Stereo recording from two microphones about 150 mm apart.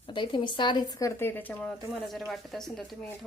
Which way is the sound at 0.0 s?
35° left (ahead or behind).